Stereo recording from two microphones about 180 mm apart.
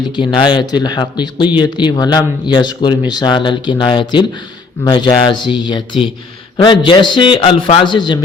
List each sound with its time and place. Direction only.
0.2 s speech: 25° left (ahead or behind)